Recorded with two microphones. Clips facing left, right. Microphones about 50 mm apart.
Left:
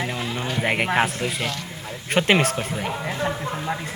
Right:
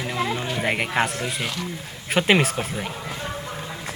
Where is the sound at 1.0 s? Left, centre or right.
Centre.